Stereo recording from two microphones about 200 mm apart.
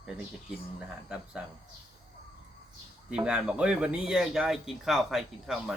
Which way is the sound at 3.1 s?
5° right (ahead or behind).